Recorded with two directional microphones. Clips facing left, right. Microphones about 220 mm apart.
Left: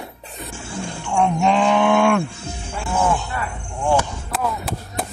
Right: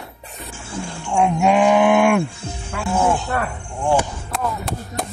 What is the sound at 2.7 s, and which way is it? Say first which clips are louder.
Speech: right 4 dB; 80° right.